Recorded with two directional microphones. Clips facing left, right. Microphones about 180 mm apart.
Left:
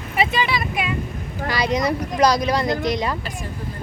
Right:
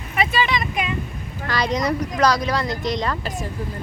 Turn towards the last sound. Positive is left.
turn(degrees=10)  # may be behind; listen again after turning